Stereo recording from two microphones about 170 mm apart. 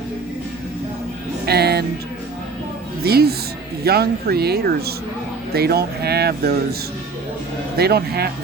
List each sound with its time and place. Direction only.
1.5 s music: 70° right (ahead or behind)
3.0 s speech: 65° right (ahead or behind)
7.8 s speech: 65° right (ahead or behind)